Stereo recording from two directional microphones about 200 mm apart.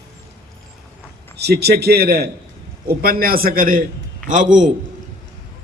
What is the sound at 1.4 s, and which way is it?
A man's voice, 55° right (ahead or behind).